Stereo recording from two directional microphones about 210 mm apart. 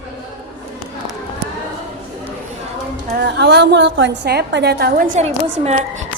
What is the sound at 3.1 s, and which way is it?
A woman's voice, 55° right (ahead or behind).